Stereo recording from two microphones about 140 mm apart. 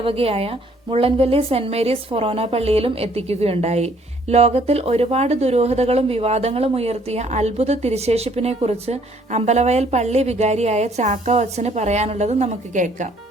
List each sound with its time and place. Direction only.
0.0 s a woman's voice: 40° right (ahead or behind); by 13.1 s 60° right (ahead or behind)